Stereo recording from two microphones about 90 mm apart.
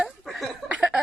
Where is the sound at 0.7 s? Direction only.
10° right (ahead or behind).